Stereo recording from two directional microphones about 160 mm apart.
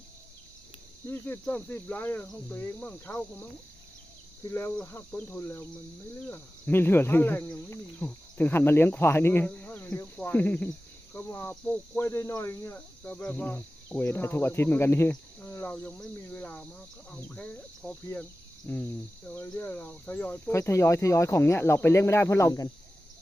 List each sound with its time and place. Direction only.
1.0 s speech: 15° left (ahead or behind)